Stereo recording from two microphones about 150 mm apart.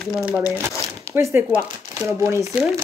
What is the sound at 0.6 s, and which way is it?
Speech, 20° right (ahead or behind).